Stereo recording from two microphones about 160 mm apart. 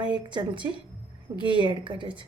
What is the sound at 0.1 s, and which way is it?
A woman's voice, 25° right (ahead or behind).